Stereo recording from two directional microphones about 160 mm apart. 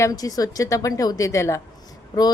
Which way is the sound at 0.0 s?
20° left (ahead or behind).